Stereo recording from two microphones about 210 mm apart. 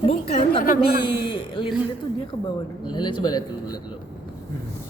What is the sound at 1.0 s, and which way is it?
Speech, 25° left (ahead or behind).